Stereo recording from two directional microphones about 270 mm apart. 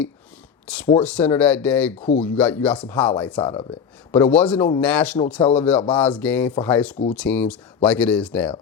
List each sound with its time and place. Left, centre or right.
0.7 s speech: centre
3.4 s speech: centre
4.1 s speech: centre